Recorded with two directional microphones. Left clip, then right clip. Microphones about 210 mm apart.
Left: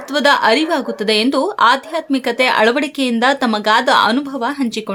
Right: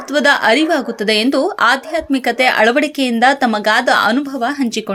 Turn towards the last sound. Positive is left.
turn(degrees=0)  # may be behind; listen again after turning